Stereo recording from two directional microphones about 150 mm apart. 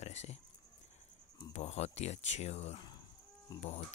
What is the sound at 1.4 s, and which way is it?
Speech, 45° left (ahead or behind).